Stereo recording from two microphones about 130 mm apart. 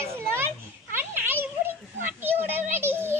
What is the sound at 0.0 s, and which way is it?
Children playing, 20° right (ahead or behind).